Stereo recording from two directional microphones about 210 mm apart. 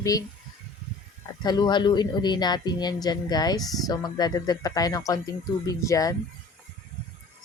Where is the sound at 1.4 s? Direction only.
20° left (ahead or behind).